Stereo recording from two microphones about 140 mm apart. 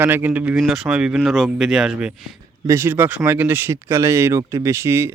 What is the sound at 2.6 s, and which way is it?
Speech, 20° right (ahead or behind).